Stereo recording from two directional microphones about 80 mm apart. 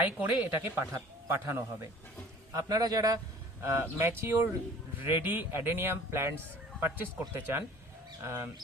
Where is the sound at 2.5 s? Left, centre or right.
Right.